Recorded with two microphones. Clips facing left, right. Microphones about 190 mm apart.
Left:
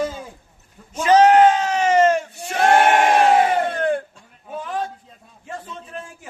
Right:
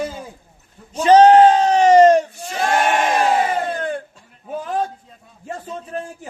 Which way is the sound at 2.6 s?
60° left (ahead or behind).